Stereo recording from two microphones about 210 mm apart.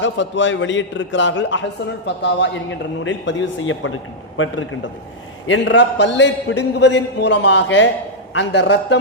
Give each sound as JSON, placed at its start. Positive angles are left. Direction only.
{"t": 0.0, "sound": "a man's voice", "side_deg": 60}
{"t": 5.5, "sound": "a man's voice", "side_deg": 60}